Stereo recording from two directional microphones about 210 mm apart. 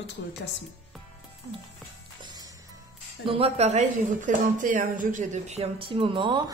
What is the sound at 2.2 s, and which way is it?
Music, 20° right (ahead or behind).